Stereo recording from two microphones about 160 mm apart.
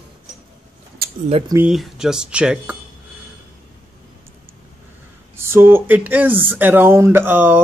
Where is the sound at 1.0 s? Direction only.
75° right (ahead or behind).